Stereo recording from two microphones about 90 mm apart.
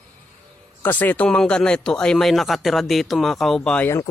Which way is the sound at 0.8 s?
20° left (ahead or behind).